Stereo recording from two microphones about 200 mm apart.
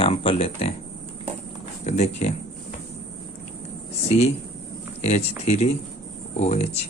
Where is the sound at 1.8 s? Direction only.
35° left (ahead or behind).